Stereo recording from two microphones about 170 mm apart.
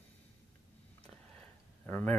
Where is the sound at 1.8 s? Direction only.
10° left (ahead or behind).